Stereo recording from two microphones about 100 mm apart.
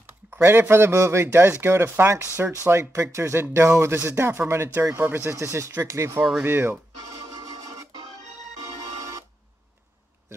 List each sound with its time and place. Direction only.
0.3 s speech: 20° right (ahead or behind)
7.1 s music: 45° right (ahead or behind)